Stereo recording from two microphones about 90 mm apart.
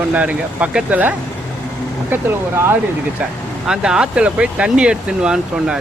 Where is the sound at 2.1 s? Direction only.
25° right (ahead or behind).